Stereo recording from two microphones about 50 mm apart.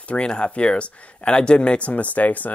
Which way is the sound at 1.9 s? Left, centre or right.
Left.